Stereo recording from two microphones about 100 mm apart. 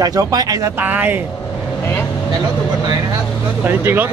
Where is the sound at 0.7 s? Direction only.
20° right (ahead or behind).